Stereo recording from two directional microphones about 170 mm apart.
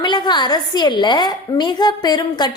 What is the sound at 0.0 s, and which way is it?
A woman's voice, 25° left (ahead or behind).